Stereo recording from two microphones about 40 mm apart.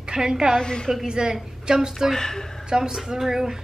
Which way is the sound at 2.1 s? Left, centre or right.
Centre.